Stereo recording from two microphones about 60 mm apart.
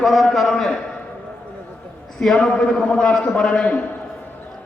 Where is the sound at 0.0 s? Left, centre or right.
Centre.